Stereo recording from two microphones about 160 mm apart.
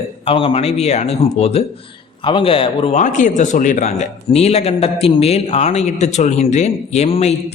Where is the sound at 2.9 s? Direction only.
50° left (ahead or behind).